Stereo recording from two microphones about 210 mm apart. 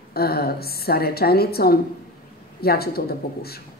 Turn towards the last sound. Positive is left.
turn(degrees=45)  # may be behind; listen again after turning